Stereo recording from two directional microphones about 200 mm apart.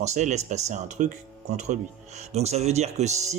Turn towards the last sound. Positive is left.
turn(degrees=-35)  # may be behind; listen again after turning